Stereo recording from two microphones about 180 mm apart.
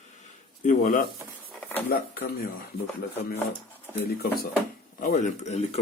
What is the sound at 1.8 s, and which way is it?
Speech, 55° left (ahead or behind).